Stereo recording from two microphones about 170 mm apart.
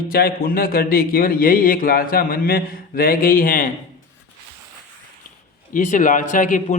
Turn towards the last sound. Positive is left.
turn(degrees=50)  # may be behind; listen again after turning